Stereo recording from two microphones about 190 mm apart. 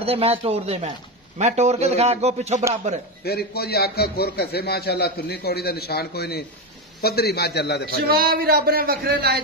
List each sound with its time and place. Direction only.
0.0 s speech: 30° right (ahead or behind)
3.3 s a man's voice: 55° left (ahead or behind)
8.1 s a man's voice: 50° right (ahead or behind)